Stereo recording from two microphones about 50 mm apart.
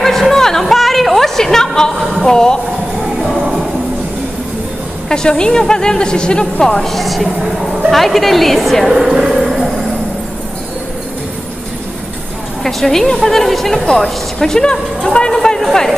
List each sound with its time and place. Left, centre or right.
0.0 s music: centre
2.2 s speech: centre
3.3 s music: centre
5.1 s a woman's voice: centre
12.6 s a woman's voice: centre